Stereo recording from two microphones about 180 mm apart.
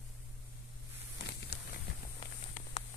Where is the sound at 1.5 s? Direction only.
65° left (ahead or behind).